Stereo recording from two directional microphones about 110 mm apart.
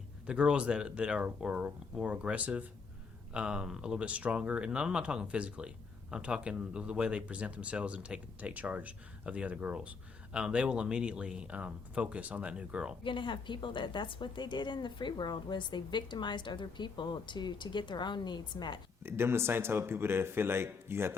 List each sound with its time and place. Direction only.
0.3 s speech: 10° right (ahead or behind)
13.1 s a woman's voice: 45° left (ahead or behind)
19.0 s a man's voice: 20° right (ahead or behind)